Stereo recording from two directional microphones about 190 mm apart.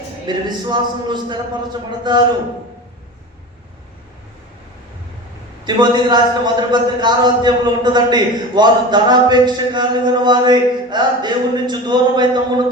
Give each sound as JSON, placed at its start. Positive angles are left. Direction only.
{"t": 0.3, "sound": "a man's voice", "side_deg": -25}
{"t": 5.6, "sound": "a man's voice", "side_deg": -25}